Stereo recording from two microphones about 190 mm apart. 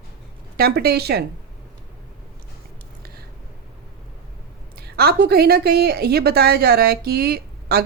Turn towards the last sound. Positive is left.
turn(degrees=-55)  # may be behind; listen again after turning